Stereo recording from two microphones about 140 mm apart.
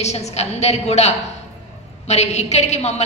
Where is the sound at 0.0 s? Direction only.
50° left (ahead or behind).